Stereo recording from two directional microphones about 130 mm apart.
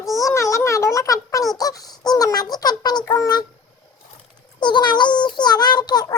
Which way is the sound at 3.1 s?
25° left (ahead or behind).